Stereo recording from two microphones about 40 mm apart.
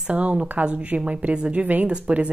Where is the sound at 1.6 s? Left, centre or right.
Right.